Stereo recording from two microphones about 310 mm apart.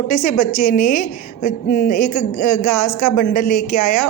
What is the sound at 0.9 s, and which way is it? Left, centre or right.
A woman's voice, left.